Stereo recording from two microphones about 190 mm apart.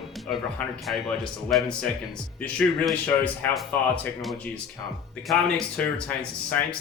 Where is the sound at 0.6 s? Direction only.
5° left (ahead or behind).